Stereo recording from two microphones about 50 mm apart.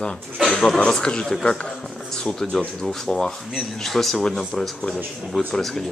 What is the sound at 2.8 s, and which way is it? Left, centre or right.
A man's voice, centre.